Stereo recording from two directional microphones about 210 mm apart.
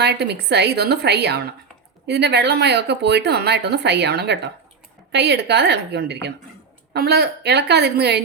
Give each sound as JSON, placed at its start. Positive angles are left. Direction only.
{"t": 0.0, "sound": "speech", "side_deg": -55}